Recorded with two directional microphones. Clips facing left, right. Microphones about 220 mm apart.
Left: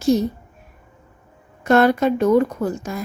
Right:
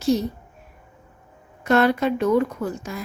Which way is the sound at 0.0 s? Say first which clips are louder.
Left 3 dB; 45° left (ahead or behind).